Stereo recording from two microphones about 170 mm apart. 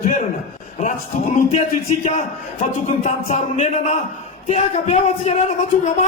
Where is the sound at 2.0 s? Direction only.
45° left (ahead or behind).